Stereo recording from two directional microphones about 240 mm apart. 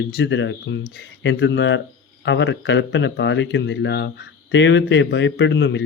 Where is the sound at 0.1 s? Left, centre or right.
Left.